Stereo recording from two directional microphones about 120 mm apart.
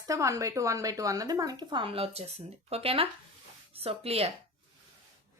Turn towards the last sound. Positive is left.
turn(degrees=-55)  # may be behind; listen again after turning